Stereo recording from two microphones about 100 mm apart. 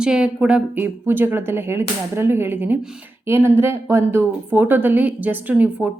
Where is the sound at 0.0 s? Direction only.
10° right (ahead or behind).